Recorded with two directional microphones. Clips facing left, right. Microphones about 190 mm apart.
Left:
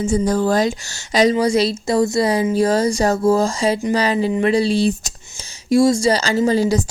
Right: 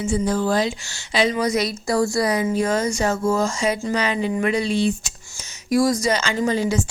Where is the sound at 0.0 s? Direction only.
40° left (ahead or behind).